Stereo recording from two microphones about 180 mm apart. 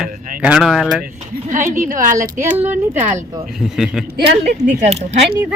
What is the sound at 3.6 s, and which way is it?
Speech, centre (ahead or behind).